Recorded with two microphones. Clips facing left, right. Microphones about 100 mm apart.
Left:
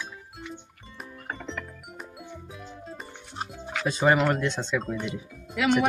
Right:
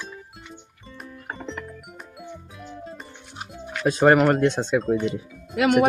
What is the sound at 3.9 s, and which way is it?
Speech, 55° right (ahead or behind).